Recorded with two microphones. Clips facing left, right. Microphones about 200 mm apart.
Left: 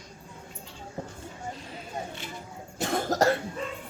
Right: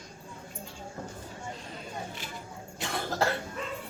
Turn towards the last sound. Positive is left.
turn(degrees=45)  # may be behind; listen again after turning